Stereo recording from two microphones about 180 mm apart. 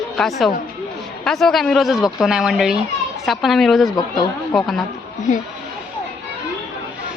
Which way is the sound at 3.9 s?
20° left (ahead or behind).